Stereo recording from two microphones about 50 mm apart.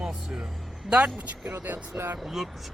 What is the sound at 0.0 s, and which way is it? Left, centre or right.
Vehicle, centre.